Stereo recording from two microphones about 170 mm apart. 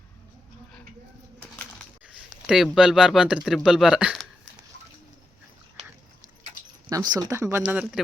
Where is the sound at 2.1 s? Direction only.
Centre (ahead or behind).